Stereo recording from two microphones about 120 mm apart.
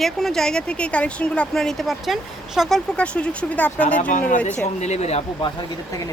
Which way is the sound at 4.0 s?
90° left.